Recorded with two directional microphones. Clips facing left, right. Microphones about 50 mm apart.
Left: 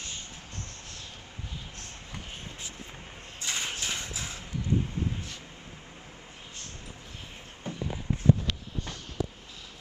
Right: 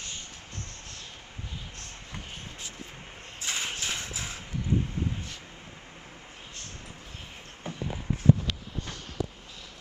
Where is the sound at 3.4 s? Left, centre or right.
Centre.